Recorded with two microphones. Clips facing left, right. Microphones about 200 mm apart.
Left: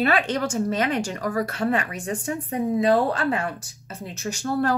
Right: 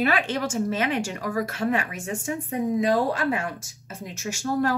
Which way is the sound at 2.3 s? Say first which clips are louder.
Even; 10° right (ahead or behind).